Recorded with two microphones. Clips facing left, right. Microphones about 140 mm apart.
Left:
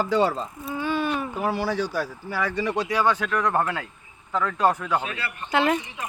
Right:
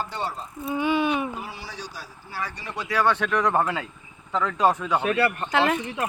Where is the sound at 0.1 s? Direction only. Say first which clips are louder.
Left 9 dB; 90° left.